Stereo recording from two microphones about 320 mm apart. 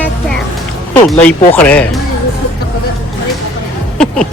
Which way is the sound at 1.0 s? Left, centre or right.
Centre.